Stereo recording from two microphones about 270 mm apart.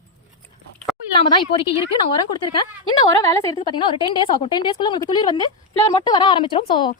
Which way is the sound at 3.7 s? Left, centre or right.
Centre.